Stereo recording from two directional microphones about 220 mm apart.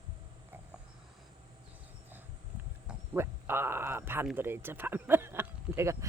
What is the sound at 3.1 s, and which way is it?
Speech, 10° right (ahead or behind).